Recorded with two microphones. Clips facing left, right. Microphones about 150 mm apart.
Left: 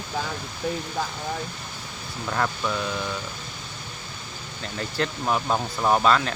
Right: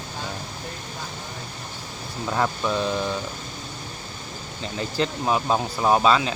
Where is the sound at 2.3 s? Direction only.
15° right (ahead or behind).